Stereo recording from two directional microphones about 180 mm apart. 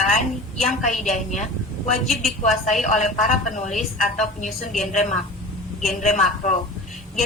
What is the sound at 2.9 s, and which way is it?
Speech, 45° left (ahead or behind).